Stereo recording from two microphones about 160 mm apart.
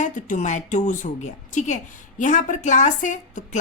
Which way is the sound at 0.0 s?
50° left (ahead or behind).